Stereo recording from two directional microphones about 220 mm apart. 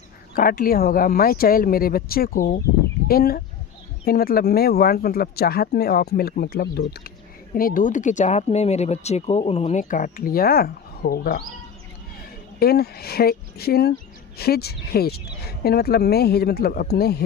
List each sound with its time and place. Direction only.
0.3 s speech: 40° left (ahead or behind)
12.5 s speech: 45° left (ahead or behind)